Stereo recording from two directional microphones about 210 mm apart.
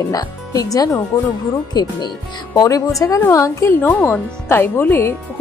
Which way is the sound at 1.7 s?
20° left (ahead or behind).